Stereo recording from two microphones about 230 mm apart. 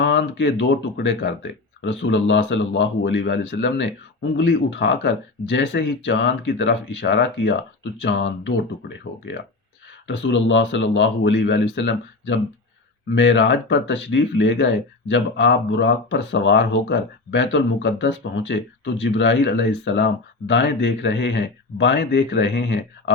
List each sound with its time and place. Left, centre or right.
0.0 s speech: left